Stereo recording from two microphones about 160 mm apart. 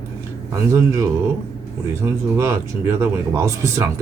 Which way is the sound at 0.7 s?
20° right (ahead or behind).